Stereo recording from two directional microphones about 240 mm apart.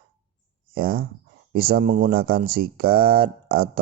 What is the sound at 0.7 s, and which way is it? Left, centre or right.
Speech, right.